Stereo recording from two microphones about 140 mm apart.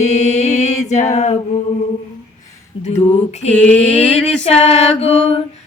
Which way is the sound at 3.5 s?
10° left (ahead or behind).